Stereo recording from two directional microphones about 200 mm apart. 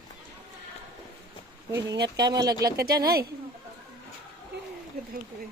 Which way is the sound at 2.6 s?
50° right (ahead or behind).